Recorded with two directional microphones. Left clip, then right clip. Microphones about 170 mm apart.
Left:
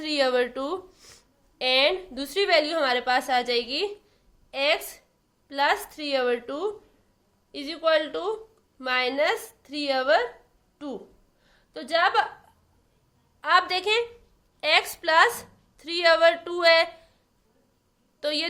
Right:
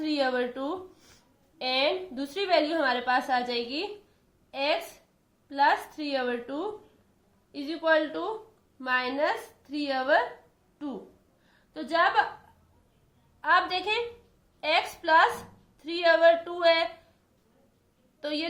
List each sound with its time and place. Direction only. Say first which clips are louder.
0.0 s a woman's voice: left 4 dB; 55° left (ahead or behind)
13.4 s a woman's voice: left 3 dB; 60° left (ahead or behind)
18.2 s a woman's voice: left 5 dB; 60° left (ahead or behind)